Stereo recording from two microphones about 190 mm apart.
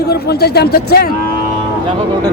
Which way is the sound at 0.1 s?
55° left (ahead or behind).